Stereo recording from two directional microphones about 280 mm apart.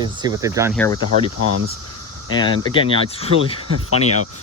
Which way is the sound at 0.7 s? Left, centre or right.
Centre.